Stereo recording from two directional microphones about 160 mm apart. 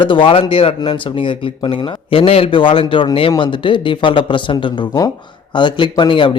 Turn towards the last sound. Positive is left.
turn(degrees=30)  # may be behind; listen again after turning